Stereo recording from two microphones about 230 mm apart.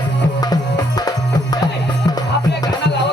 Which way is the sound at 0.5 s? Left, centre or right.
Centre.